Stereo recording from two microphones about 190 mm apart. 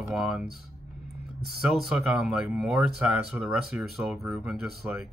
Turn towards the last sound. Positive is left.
turn(degrees=-5)  # may be behind; listen again after turning